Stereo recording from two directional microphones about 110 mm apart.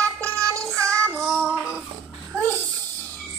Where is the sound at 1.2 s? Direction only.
5° right (ahead or behind).